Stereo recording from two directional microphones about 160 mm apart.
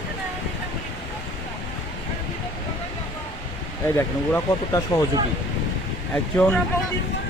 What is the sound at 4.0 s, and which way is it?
Speech, 20° left (ahead or behind).